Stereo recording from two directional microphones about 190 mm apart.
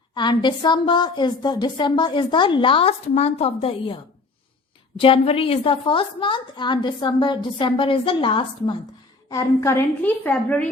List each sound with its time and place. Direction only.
0.1 s a woman's voice: 25° left (ahead or behind)
4.9 s a woman's voice: 25° left (ahead or behind)
9.3 s a woman's voice: 15° left (ahead or behind)